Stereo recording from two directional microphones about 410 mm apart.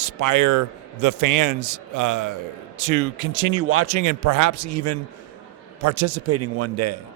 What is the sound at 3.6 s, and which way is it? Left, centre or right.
Speech, right.